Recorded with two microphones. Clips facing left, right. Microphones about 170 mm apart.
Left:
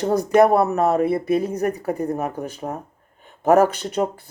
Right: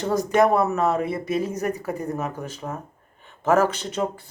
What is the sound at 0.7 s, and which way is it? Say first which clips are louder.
Speech: left 4 dB; 60° left (ahead or behind).